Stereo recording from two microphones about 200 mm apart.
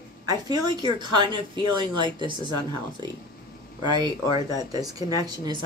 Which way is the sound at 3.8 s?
20° right (ahead or behind).